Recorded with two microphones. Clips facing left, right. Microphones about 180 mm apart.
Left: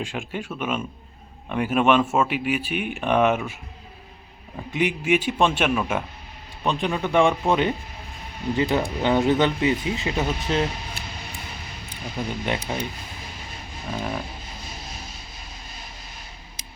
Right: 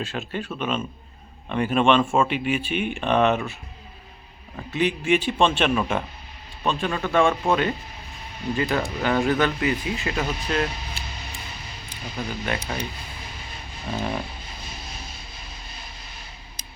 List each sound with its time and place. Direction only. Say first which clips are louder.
0.0 s a man's voice: even; 10° left (ahead or behind)
12.3 s speech: left 2 dB; 20° left (ahead or behind)
13.9 s speech: right 1 dB; centre (ahead or behind)